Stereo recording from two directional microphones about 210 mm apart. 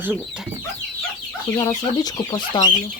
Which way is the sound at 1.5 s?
20° left (ahead or behind).